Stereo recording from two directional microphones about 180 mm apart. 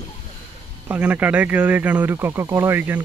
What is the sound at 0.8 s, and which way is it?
Speech, 5° right (ahead or behind).